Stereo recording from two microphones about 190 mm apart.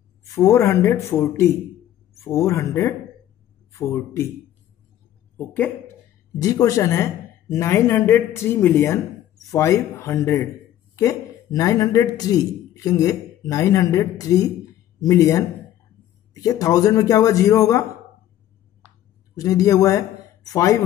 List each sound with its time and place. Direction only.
0.3 s speech: 15° left (ahead or behind)
6.3 s a man's voice: 20° left (ahead or behind)
19.3 s a man's voice: 20° left (ahead or behind)